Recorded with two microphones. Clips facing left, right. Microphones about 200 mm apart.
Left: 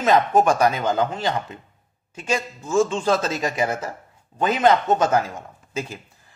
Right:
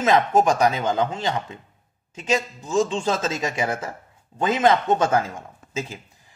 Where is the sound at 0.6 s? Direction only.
20° right (ahead or behind).